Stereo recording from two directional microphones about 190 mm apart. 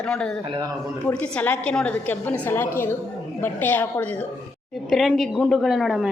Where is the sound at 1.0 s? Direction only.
5° left (ahead or behind).